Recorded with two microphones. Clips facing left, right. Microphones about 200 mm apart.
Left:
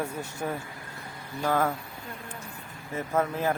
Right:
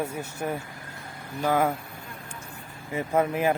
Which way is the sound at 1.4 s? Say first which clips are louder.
Right 2 dB; 10° right (ahead or behind).